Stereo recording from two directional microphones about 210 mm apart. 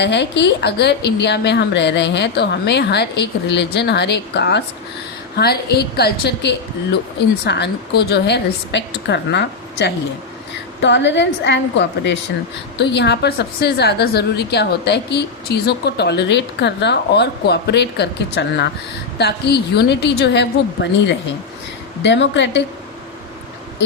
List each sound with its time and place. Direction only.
0.0 s a woman's voice: 55° left (ahead or behind)
22.0 s a woman's voice: 55° left (ahead or behind)